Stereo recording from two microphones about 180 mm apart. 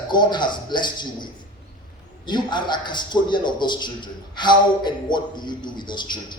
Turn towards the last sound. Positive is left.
turn(degrees=25)  # may be behind; listen again after turning